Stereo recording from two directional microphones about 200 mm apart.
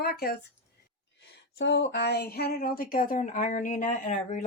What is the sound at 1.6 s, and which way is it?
Speech, 60° left (ahead or behind).